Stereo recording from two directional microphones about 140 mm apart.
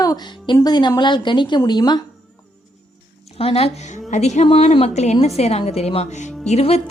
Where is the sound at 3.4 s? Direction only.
45° left (ahead or behind).